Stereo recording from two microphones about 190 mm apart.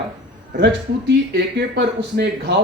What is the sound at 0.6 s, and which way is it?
A man's voice, 60° right (ahead or behind).